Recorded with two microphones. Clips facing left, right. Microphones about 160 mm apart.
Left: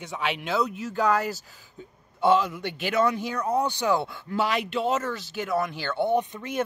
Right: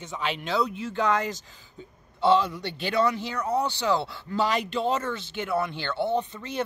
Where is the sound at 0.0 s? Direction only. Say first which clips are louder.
Left 1 dB; 10° left (ahead or behind).